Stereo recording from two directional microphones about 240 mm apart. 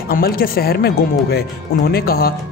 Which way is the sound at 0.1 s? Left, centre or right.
Left.